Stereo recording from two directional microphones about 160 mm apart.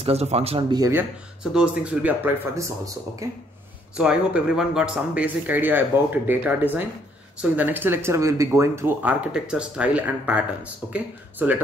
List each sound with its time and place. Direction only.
0.0 s speech: 40° right (ahead or behind)
0.9 s speech: 5° right (ahead or behind)
3.9 s speech: 5° right (ahead or behind)